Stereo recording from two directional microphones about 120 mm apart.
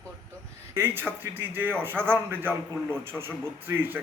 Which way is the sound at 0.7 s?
20° right (ahead or behind).